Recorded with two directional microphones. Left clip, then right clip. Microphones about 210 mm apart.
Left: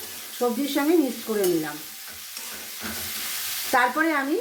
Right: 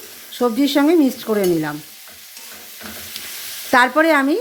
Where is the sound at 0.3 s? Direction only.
55° right (ahead or behind).